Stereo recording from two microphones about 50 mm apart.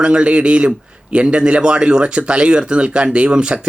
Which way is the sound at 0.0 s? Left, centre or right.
Right.